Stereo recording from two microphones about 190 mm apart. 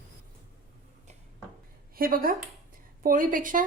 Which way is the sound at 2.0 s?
50° right (ahead or behind).